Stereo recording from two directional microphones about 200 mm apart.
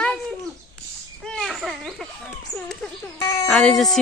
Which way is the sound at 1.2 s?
Centre (ahead or behind).